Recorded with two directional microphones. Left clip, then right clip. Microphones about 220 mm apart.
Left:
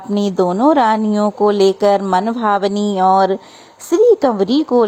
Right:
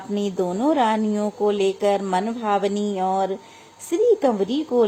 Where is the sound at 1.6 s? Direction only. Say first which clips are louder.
Left 9 dB; 35° left (ahead or behind).